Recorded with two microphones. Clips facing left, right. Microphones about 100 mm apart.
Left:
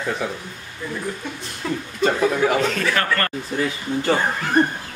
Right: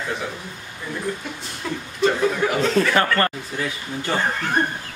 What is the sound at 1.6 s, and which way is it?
Speech, centre (ahead or behind).